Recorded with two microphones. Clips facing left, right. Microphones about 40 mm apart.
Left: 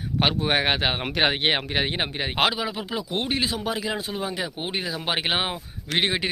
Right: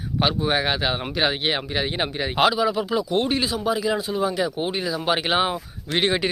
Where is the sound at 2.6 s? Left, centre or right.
Left.